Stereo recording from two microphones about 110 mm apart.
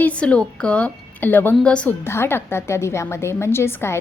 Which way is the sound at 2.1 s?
20° left (ahead or behind).